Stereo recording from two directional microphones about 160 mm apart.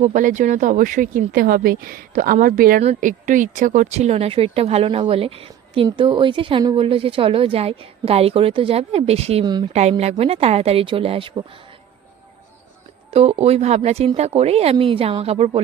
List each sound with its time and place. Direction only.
0.0 s speech: 55° right (ahead or behind)
9.4 s speech: 25° right (ahead or behind)
10.0 s speech: 40° right (ahead or behind)
13.1 s speech: 40° right (ahead or behind)